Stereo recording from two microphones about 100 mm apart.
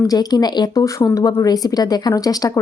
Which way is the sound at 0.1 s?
40° left (ahead or behind).